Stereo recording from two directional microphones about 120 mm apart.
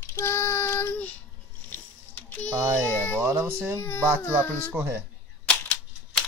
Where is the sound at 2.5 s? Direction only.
20° right (ahead or behind).